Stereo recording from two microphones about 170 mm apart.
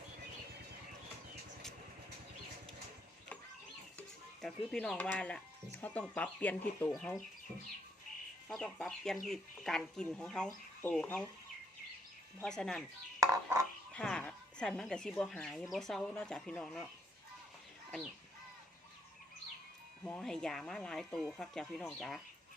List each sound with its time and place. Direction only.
4.4 s speech: 5° left (ahead or behind)
8.4 s speech: centre (ahead or behind)
12.4 s speech: 5° left (ahead or behind)
13.1 s a sound: 20° right (ahead or behind)
13.9 s speech: 5° left (ahead or behind)
20.1 s speech: 5° left (ahead or behind)